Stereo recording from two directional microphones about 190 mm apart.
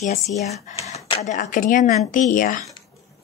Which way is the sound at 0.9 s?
35° left (ahead or behind).